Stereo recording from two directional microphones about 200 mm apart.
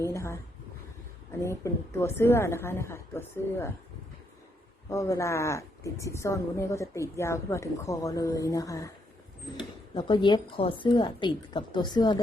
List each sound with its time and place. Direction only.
0.0 s a sound: 15° left (ahead or behind)
1.3 s speech: 15° left (ahead or behind)
4.9 s speech: 15° left (ahead or behind)
9.9 s a woman's voice: 20° left (ahead or behind)